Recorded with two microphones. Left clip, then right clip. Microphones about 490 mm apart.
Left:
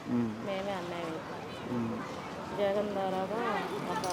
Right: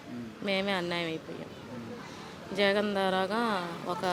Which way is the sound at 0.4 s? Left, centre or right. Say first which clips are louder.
Right 5 dB; right.